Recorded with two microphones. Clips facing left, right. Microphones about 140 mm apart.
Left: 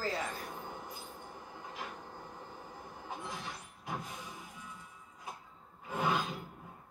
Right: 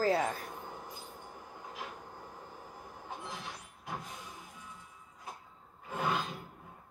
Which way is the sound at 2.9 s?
Centre (ahead or behind).